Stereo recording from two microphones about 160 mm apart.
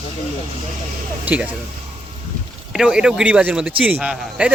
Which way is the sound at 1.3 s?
10° right (ahead or behind).